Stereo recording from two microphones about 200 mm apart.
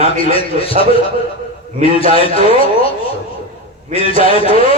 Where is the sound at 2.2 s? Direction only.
30° left (ahead or behind).